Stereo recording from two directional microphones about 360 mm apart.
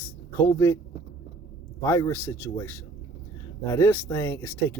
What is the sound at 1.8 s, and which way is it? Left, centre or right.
Speech, centre.